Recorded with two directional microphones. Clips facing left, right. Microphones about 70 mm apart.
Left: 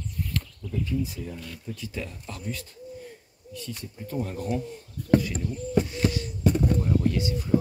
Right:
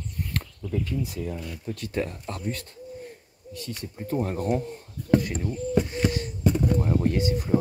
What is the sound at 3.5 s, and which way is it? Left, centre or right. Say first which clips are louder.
Speech: right 2 dB; right.